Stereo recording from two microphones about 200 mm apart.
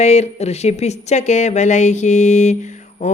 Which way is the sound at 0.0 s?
35° left (ahead or behind).